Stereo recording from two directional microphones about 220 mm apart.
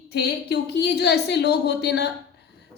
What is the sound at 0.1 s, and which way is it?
A woman's voice, 50° left (ahead or behind).